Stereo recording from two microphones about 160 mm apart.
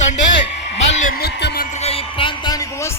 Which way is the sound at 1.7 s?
40° left (ahead or behind).